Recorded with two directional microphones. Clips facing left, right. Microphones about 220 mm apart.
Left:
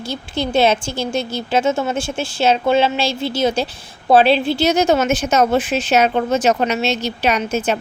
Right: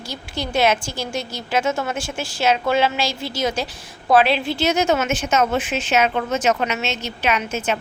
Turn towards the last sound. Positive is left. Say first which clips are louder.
# left 4 dB
turn(degrees=35)  # may be behind; listen again after turning